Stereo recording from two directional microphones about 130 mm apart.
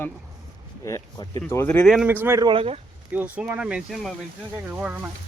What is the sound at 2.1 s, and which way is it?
Speech, 15° right (ahead or behind).